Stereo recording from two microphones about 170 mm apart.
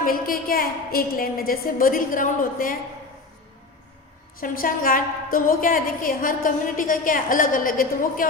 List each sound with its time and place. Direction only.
0.0 s a woman's voice: 55° left (ahead or behind)
4.4 s a woman's voice: 55° left (ahead or behind)